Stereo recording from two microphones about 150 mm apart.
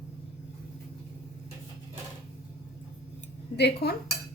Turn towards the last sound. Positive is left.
turn(degrees=90)